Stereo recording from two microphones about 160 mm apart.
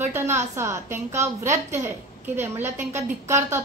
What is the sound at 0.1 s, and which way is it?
A woman's voice, 15° right (ahead or behind).